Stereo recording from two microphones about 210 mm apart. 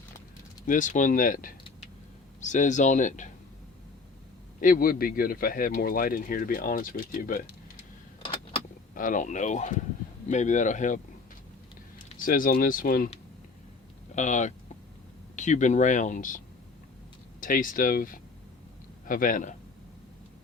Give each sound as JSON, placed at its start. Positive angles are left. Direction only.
{"t": 0.7, "sound": "speech", "side_deg": 35}
{"t": 4.6, "sound": "speech", "side_deg": 45}
{"t": 9.0, "sound": "speech", "side_deg": 40}
{"t": 12.0, "sound": "speech", "side_deg": 40}
{"t": 14.2, "sound": "speech", "side_deg": 35}
{"t": 17.4, "sound": "speech", "side_deg": 40}